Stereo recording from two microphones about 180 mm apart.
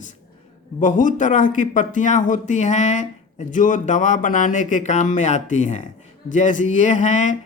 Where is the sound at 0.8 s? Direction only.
45° left (ahead or behind).